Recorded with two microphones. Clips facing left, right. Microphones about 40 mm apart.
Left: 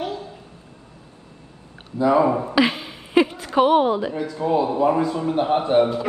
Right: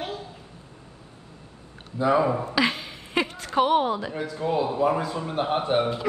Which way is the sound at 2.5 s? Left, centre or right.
Centre.